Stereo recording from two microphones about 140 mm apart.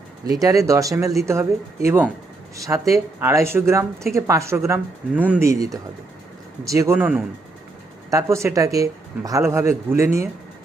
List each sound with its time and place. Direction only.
0.3 s speech: 25° right (ahead or behind)